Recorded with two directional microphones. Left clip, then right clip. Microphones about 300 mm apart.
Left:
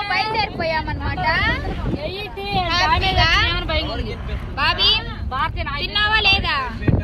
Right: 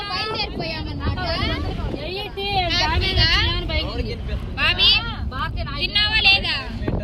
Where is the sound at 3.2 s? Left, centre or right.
Centre.